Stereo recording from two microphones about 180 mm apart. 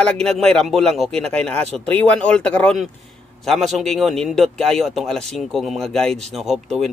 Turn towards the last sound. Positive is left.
turn(degrees=0)  # may be behind; listen again after turning